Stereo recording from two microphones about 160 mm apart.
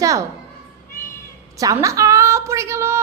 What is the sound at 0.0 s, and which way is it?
Children playing, 20° right (ahead or behind).